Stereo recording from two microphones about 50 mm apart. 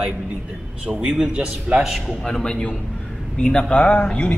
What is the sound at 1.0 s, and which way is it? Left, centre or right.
Speech, centre.